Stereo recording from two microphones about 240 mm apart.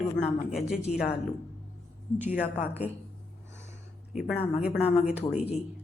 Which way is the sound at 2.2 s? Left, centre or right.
Centre.